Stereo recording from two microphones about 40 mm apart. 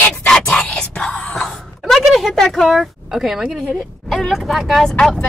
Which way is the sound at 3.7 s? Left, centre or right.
Centre.